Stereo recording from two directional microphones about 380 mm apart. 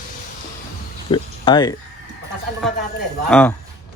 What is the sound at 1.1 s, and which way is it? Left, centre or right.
Speech, centre.